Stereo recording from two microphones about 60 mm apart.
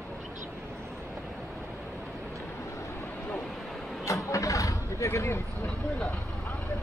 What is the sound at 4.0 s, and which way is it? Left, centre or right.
Vehicle, left.